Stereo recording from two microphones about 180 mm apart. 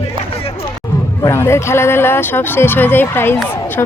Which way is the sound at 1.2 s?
15° left (ahead or behind).